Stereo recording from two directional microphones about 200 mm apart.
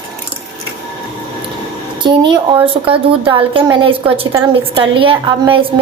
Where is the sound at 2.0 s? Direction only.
25° right (ahead or behind).